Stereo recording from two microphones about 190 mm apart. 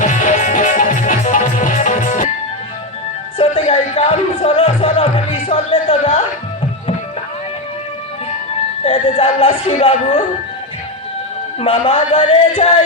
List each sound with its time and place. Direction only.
0.0 s music: 40° left (ahead or behind)
3.3 s music: 30° left (ahead or behind)
8.8 s speech: 30° left (ahead or behind)
11.6 s speech: 35° left (ahead or behind)